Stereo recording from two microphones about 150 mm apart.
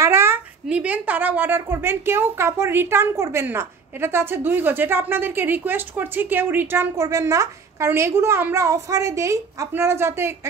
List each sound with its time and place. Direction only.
0.0 s speech: 15° right (ahead or behind)